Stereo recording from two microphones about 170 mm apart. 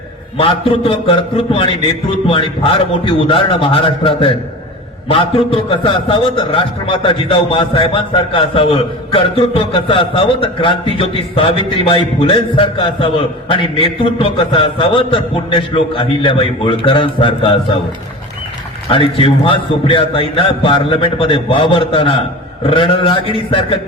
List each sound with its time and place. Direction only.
0.3 s a man's voice: 30° left (ahead or behind)
18.9 s a man's voice: 30° left (ahead or behind)